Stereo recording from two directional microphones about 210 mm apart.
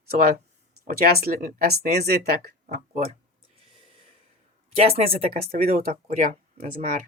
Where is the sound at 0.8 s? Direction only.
45° right (ahead or behind).